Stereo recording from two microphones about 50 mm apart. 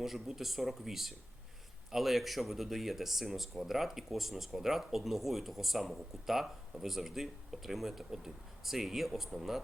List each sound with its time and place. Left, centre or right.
0.0 s speech: centre